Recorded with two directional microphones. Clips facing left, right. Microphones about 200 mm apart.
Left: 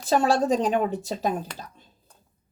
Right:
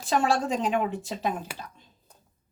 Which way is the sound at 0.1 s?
40° left (ahead or behind).